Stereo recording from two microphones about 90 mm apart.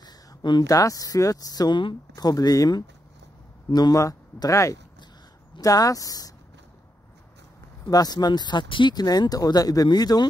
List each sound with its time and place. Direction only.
0.0 s a sound: 50° left (ahead or behind)
0.7 s speech: 40° left (ahead or behind); by 2.0 s 60° left (ahead or behind)
2.1 s speech: 45° left (ahead or behind)
7.9 s speech: 45° left (ahead or behind); by 8.9 s 65° left (ahead or behind)
8.9 s speech: 45° left (ahead or behind)